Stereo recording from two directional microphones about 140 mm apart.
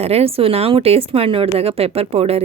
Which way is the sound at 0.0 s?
50° right (ahead or behind).